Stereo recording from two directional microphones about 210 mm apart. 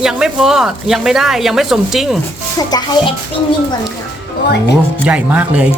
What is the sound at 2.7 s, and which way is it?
Speech, 20° left (ahead or behind).